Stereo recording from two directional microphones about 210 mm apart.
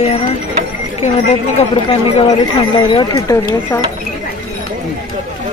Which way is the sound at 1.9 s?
25° left (ahead or behind).